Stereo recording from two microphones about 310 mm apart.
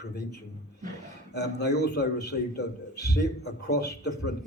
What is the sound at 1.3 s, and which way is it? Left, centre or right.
A man's voice, left.